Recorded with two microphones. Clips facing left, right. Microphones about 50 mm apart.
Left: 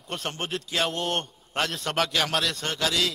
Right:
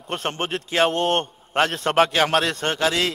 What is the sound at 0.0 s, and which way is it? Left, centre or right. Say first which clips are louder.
A man's voice: right 6 dB; right.